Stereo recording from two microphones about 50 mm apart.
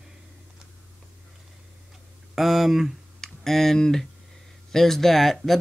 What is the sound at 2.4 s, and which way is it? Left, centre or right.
Speech, centre.